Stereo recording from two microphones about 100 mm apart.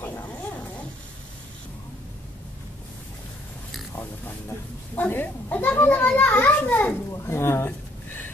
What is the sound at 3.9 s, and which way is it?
Pig, 20° left (ahead or behind).